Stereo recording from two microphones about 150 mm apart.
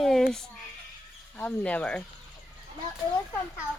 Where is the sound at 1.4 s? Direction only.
10° left (ahead or behind).